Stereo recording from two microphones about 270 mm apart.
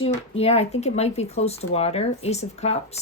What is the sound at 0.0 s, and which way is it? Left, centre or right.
Speech, left.